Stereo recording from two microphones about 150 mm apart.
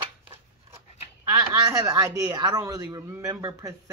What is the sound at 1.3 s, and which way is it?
Speech, 25° right (ahead or behind).